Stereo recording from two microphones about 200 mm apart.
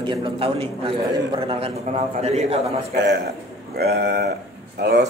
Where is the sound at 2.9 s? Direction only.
60° right (ahead or behind).